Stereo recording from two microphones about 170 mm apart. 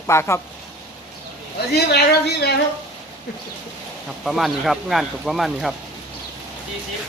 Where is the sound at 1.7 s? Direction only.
70° left (ahead or behind).